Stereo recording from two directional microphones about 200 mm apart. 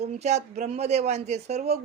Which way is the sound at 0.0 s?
35° right (ahead or behind).